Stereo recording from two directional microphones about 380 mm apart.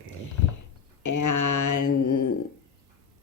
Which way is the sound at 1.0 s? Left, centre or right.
Left.